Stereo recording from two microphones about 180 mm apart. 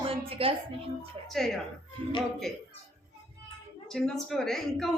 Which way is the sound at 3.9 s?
Centre (ahead or behind).